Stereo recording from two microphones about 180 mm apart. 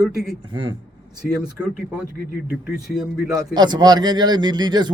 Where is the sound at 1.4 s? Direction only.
5° right (ahead or behind).